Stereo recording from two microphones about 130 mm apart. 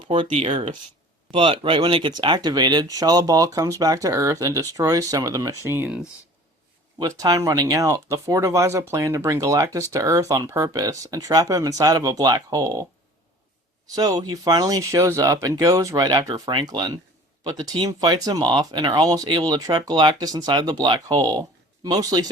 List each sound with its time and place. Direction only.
0.0 s speech: 40° right (ahead or behind)
0.3 s speech: 55° right (ahead or behind)
1.3 s speech: 40° right (ahead or behind); by 5.9 s 20° right (ahead or behind)
7.0 s speech: 30° right (ahead or behind)
13.8 s speech: 30° right (ahead or behind)